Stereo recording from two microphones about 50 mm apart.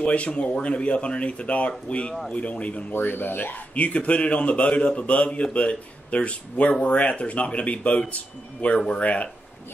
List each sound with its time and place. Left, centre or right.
0.0 s speech: left
2.9 s speech: left
3.7 s speech: left